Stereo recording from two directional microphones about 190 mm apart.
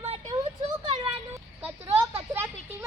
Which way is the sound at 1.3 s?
10° right (ahead or behind).